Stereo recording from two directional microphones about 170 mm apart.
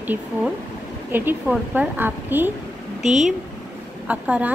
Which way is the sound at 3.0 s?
45° right (ahead or behind).